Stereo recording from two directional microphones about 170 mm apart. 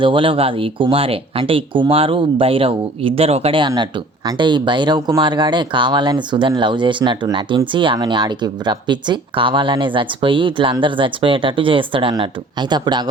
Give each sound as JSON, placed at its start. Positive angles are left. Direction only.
{"t": 0.0, "sound": "speech", "side_deg": -30}